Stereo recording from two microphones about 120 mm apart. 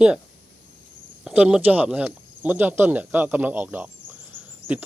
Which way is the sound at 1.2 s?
5° right (ahead or behind).